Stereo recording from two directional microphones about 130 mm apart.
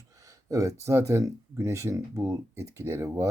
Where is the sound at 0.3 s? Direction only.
25° right (ahead or behind).